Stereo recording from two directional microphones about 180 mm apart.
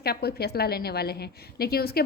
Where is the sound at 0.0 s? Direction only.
60° left (ahead or behind).